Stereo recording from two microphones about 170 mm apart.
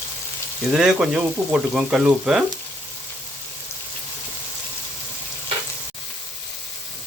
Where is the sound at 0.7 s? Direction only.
5° right (ahead or behind).